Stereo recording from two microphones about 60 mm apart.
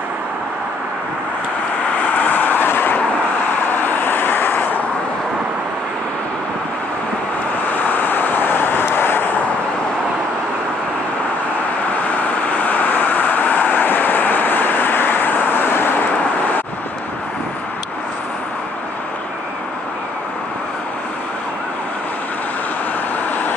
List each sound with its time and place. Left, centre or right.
2.0 s vehicle: left
7.6 s vehicle: left
12.2 s vehicle: left